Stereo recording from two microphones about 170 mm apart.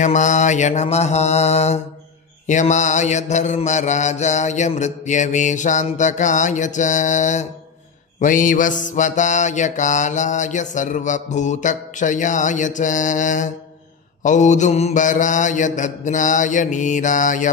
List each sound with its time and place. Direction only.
0.0 s mantra: 45° left (ahead or behind)